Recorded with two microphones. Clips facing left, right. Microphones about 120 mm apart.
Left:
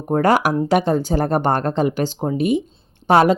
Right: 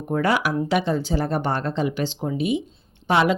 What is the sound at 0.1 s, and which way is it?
Speech, 45° left (ahead or behind).